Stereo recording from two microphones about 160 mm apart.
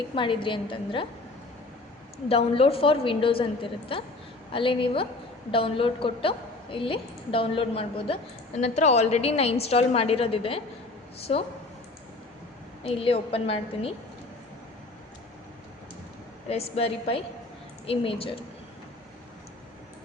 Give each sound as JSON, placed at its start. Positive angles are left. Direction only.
{"t": 0.1, "sound": "a woman's voice", "side_deg": 30}
{"t": 2.3, "sound": "a woman's voice", "side_deg": 35}
{"t": 12.9, "sound": "a woman's voice", "side_deg": 35}
{"t": 16.5, "sound": "a woman's voice", "side_deg": 40}